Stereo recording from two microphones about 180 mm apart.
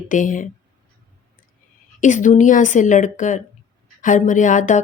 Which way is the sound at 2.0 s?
45° left (ahead or behind).